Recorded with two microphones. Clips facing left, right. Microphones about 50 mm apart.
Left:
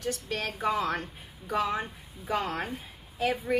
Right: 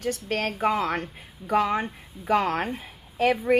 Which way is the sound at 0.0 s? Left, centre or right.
Right.